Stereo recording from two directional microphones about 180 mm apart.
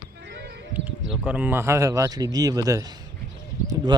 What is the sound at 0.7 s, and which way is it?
Speech, 5° right (ahead or behind).